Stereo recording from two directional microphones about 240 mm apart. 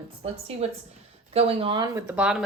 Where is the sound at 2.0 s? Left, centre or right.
Centre.